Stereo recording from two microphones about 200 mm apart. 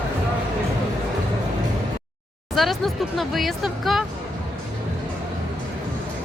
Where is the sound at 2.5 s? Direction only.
Centre (ahead or behind).